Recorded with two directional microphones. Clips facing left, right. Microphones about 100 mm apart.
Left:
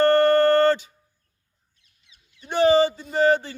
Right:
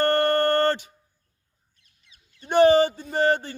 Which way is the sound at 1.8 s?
50° right (ahead or behind).